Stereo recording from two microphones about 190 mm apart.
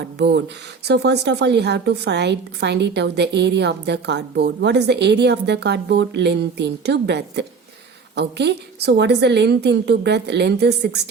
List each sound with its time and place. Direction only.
0.0 s speech: 65° right (ahead or behind)